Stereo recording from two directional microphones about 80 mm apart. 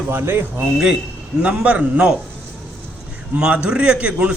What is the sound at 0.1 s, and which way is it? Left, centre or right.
Speech, right.